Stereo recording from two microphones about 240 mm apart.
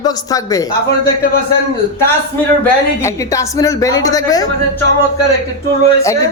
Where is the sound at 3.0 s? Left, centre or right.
Centre.